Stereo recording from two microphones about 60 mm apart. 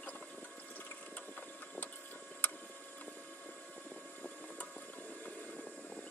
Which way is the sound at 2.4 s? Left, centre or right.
Left.